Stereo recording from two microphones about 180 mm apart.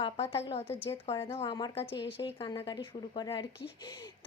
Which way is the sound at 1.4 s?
25° left (ahead or behind).